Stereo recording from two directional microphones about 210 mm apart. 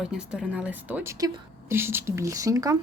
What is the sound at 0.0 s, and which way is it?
A woman's voice, 5° right (ahead or behind).